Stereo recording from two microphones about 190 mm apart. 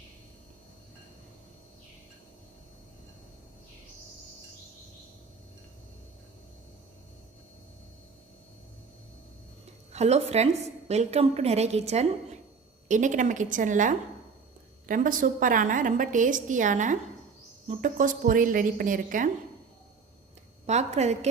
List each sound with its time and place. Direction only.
9.9 s a woman's voice: 35° right (ahead or behind)
20.7 s a woman's voice: 35° right (ahead or behind)